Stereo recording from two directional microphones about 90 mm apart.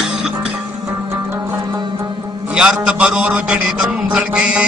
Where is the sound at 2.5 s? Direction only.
10° right (ahead or behind).